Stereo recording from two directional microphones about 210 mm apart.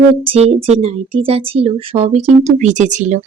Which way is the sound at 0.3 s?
30° right (ahead or behind).